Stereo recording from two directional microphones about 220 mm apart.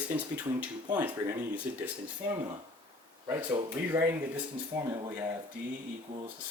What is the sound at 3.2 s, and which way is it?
Speech, 20° right (ahead or behind).